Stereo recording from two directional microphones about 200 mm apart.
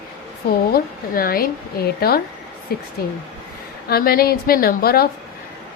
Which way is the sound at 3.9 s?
50° left (ahead or behind).